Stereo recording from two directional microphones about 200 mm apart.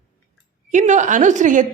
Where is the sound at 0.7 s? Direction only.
35° right (ahead or behind).